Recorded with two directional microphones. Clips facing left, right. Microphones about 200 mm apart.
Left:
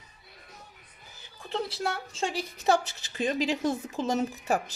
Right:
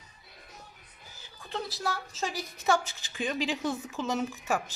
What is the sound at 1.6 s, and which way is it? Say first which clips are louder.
A woman's voice: left 2 dB; 30° left (ahead or behind).